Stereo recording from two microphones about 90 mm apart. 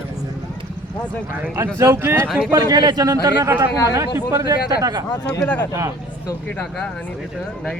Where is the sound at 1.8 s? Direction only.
30° right (ahead or behind).